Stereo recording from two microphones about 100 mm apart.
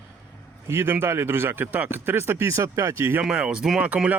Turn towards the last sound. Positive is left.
turn(degrees=-15)  # may be behind; listen again after turning